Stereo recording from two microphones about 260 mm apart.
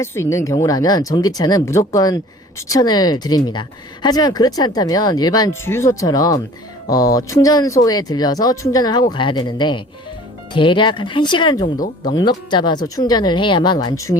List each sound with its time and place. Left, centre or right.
0.0 s speech: centre